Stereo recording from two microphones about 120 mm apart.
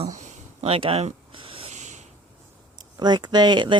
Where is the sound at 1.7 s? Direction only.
75° right (ahead or behind).